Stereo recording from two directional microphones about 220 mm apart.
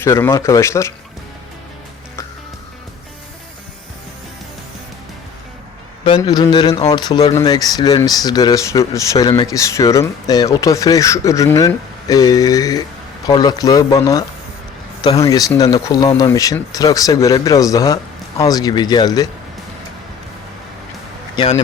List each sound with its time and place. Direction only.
0.0 s speech: 10° left (ahead or behind)
6.1 s speech: 20° left (ahead or behind)
21.3 s speech: 30° left (ahead or behind)